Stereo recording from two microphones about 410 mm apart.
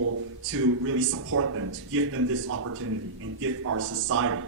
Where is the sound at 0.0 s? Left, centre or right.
Right.